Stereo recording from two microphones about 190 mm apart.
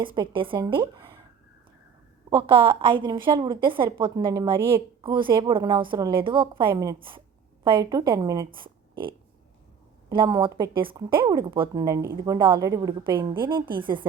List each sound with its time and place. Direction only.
0.0 s a woman's voice: 25° right (ahead or behind)
2.3 s a woman's voice: 25° right (ahead or behind)
8.5 s a sound: 25° right (ahead or behind)
10.1 s a woman's voice: 20° right (ahead or behind)